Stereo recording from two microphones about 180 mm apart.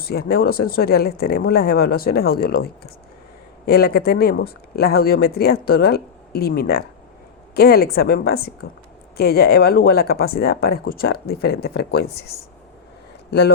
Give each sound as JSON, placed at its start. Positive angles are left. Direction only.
{"t": 0.0, "sound": "speech", "side_deg": 60}